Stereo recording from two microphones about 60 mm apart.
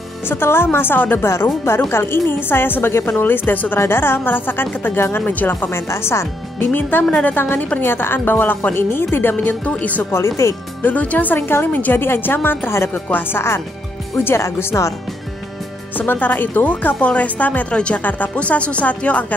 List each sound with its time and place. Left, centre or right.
0.3 s a woman's voice: left
1.2 s a woman's voice: left
5.2 s a woman's voice: left
6.7 s a woman's voice: left
9.3 s speech: left
10.1 s speech: left
10.8 s a woman's voice: left
12.7 s a woman's voice: left
14.4 s speech: left
16.0 s speech: left